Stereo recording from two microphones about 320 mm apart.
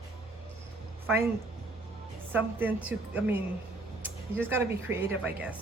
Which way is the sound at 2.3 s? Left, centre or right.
Centre.